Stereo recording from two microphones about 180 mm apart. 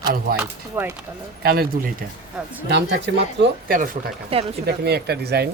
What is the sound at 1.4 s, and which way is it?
Speech, 60° right (ahead or behind).